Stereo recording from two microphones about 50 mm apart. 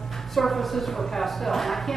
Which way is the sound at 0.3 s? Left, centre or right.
Centre.